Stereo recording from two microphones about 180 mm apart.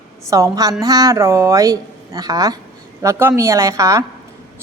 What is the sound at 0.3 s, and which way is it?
Speech, 20° right (ahead or behind).